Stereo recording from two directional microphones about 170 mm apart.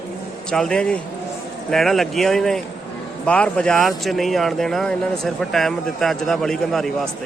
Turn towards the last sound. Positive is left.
turn(degrees=0)  # may be behind; listen again after turning